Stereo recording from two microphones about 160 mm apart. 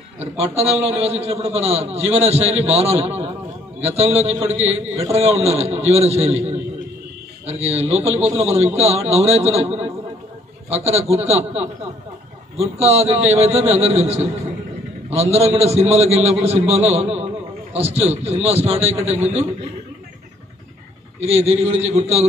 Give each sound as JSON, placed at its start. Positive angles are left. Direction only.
{"t": 0.2, "sound": "a man's voice", "side_deg": -40}
{"t": 21.2, "sound": "a man's voice", "side_deg": -40}